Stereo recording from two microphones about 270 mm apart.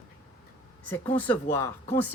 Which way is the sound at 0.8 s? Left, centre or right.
Centre.